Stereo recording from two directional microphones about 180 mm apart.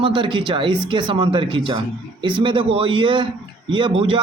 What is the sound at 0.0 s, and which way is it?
Speech, 25° right (ahead or behind).